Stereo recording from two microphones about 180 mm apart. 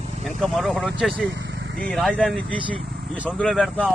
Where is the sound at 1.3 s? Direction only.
85° right.